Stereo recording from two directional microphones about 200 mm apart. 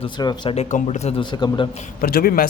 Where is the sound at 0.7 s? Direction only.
35° left (ahead or behind).